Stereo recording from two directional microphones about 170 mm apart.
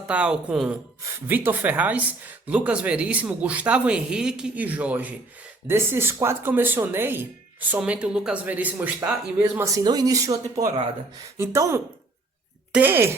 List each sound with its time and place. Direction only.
0.1 s speech: 5° right (ahead or behind)